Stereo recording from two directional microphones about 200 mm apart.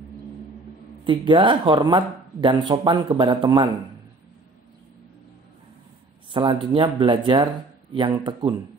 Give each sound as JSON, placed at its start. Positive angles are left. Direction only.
{"t": 1.0, "sound": "speech", "side_deg": -25}
{"t": 6.3, "sound": "speech", "side_deg": -25}